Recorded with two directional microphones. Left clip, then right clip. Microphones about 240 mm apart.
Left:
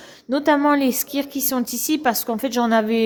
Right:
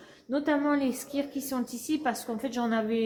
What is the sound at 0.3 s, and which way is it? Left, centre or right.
Speech, left.